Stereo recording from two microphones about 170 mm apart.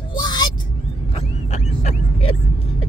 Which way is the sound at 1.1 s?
40° left (ahead or behind).